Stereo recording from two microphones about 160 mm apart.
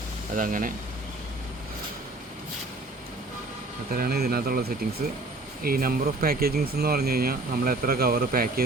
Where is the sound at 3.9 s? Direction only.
70° right (ahead or behind).